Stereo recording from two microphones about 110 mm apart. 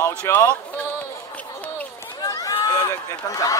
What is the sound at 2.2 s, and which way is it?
Run, 35° left (ahead or behind).